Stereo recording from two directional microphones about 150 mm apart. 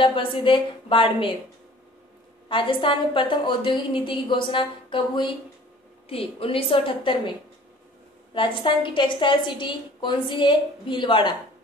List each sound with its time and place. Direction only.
0.0 s a woman's voice: 35° left (ahead or behind)
2.4 s a woman's voice: 35° left (ahead or behind)
8.4 s a woman's voice: 35° left (ahead or behind)